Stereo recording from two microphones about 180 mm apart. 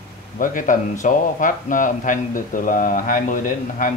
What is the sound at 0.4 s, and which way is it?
A man's voice, 45° left (ahead or behind).